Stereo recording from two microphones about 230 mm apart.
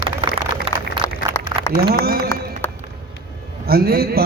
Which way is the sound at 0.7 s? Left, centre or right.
Right.